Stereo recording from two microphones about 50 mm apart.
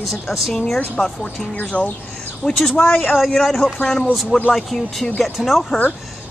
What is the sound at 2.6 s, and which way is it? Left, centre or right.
Speech, centre.